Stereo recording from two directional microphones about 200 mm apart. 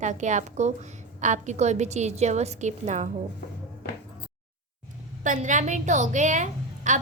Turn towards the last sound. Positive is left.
turn(degrees=-40)  # may be behind; listen again after turning